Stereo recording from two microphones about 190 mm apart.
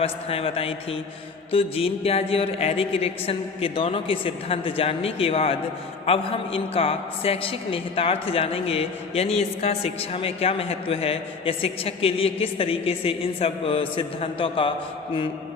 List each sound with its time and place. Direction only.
0.0 s a man's voice: 30° left (ahead or behind)